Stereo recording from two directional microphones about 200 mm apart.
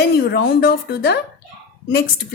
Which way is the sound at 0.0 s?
50° left (ahead or behind).